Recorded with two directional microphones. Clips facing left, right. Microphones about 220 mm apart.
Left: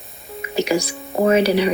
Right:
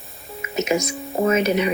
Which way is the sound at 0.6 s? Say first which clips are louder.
Left 2 dB; 35° left (ahead or behind).